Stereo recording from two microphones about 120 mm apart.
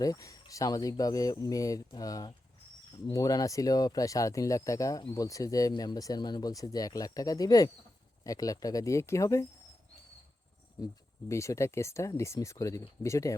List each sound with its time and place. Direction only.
0.0 s speech: 30° left (ahead or behind)
10.8 s speech: 30° left (ahead or behind)